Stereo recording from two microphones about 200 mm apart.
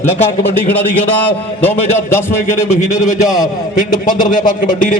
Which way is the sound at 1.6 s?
10° left (ahead or behind).